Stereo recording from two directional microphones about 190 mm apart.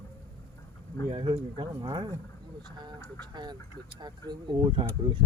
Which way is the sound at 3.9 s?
20° right (ahead or behind).